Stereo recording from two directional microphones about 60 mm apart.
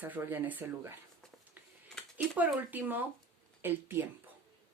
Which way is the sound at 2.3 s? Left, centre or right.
Right.